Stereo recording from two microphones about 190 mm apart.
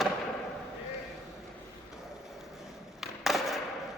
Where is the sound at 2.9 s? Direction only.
Centre (ahead or behind).